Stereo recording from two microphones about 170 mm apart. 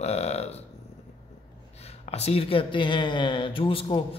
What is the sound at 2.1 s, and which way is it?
Speech, 35° left (ahead or behind).